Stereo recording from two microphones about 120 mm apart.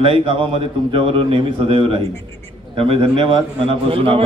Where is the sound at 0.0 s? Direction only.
50° right (ahead or behind).